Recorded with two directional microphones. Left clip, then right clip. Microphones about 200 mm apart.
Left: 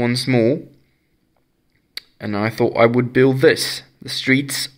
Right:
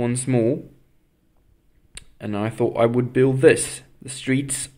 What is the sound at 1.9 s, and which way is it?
Speech, 10° left (ahead or behind).